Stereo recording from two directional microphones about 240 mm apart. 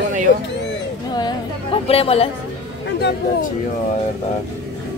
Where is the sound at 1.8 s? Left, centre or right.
Left.